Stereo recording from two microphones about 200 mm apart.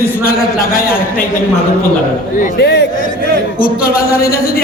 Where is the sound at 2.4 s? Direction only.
50° left (ahead or behind).